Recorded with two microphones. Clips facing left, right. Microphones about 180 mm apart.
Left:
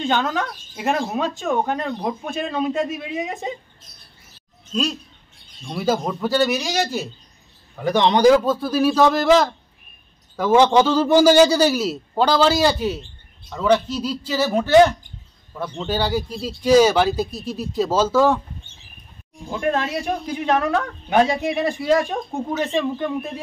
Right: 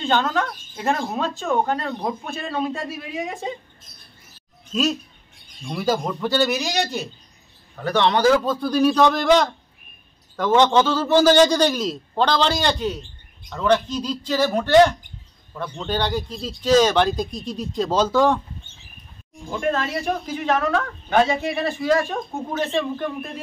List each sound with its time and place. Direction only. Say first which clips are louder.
0.0 s a man's voice: even; 10° left (ahead or behind)
4.7 s a man's voice: right 2 dB; 5° right (ahead or behind); by 8.5 s 15° left (ahead or behind)
8.5 s a man's voice: even; 5° left (ahead or behind)
19.7 s a man's voice: left 1 dB; 15° left (ahead or behind)